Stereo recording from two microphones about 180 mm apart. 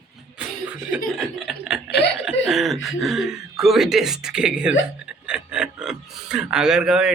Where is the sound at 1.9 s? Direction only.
70° left (ahead or behind).